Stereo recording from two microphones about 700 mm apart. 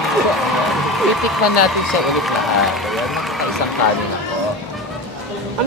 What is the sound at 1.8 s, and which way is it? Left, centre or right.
Speech, centre.